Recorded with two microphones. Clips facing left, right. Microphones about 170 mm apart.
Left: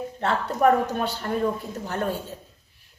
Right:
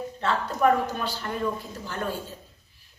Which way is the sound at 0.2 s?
50° left (ahead or behind).